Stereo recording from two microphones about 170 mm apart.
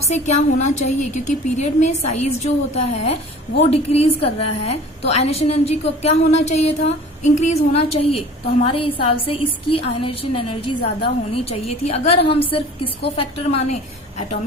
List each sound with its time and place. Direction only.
0.0 s a woman's voice: 40° left (ahead or behind)